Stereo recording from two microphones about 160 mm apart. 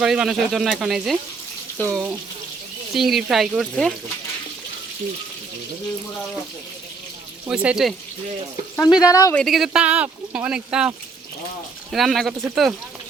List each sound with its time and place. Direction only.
0.0 s speech: 5° right (ahead or behind)
7.4 s speech: 5° right (ahead or behind)
9.0 s speech: 20° left (ahead or behind)
9.3 s speech: centre (ahead or behind)